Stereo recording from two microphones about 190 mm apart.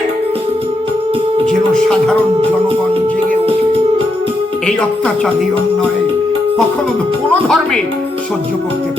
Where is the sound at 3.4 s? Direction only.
30° right (ahead or behind).